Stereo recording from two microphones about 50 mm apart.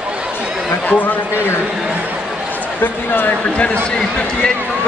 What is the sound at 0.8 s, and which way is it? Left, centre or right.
Speech, left.